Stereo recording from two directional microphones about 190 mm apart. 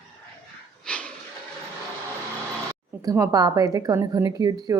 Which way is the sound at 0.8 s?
5° left (ahead or behind).